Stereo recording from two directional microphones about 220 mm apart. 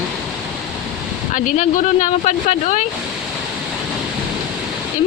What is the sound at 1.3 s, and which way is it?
Speech, 35° left (ahead or behind).